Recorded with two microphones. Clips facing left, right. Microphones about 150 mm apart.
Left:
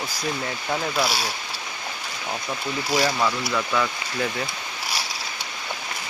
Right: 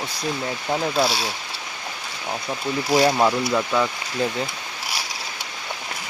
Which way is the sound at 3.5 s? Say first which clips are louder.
Right 3 dB; 20° right (ahead or behind).